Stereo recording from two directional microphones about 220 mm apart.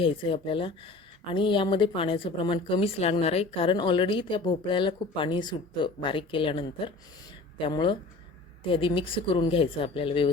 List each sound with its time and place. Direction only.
0.0 s speech: 25° left (ahead or behind)